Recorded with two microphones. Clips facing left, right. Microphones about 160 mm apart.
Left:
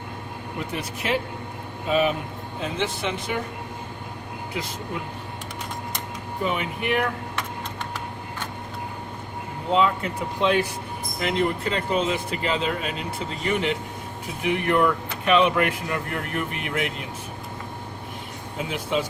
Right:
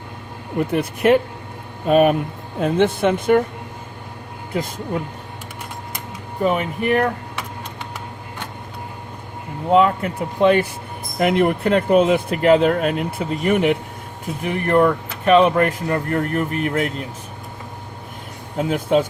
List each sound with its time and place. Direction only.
0.7 s speech: 55° right (ahead or behind)
6.4 s speech: 40° right (ahead or behind)
9.7 s speech: 55° right (ahead or behind)
14.4 s speech: 40° right (ahead or behind)
18.5 s speech: 45° right (ahead or behind)